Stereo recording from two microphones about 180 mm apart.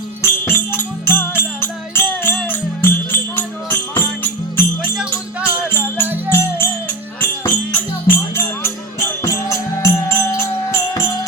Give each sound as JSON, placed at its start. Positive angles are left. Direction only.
{"t": 0.2, "sound": "music", "side_deg": 15}
{"t": 9.2, "sound": "music", "side_deg": 15}